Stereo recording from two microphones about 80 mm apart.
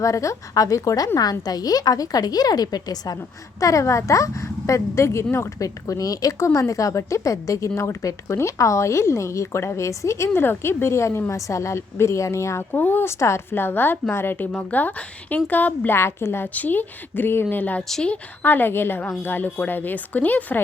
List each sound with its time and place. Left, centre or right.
0.0 s a woman's voice: left
3.6 s a woman's voice: left
12.7 s a woman's voice: left
17.8 s a woman's voice: centre
18.1 s a woman's voice: left